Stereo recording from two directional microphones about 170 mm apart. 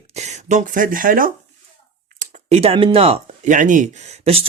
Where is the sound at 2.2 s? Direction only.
35° right (ahead or behind).